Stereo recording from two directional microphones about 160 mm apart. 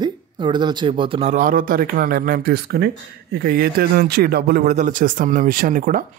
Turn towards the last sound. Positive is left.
turn(degrees=-55)  # may be behind; listen again after turning